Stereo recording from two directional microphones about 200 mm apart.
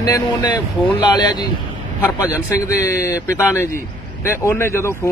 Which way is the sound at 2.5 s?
15° left (ahead or behind).